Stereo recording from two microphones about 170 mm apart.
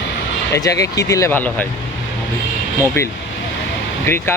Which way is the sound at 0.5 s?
20° left (ahead or behind).